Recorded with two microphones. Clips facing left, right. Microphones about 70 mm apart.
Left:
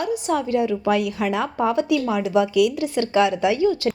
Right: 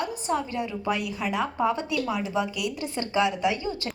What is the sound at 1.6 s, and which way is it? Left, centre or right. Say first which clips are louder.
Speech: left 7 dB; left.